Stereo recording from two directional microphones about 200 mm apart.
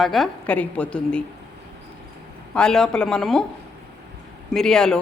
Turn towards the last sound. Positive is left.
turn(degrees=5)  # may be behind; listen again after turning